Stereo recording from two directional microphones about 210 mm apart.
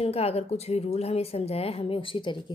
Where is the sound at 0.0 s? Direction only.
30° left (ahead or behind).